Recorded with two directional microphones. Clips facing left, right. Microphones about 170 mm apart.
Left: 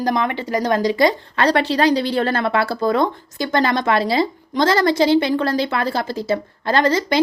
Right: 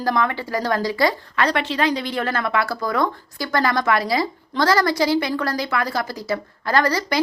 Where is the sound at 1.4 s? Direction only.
35° left (ahead or behind).